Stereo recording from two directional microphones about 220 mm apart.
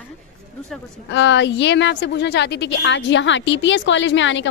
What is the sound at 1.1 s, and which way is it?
A woman's voice, 55° left (ahead or behind).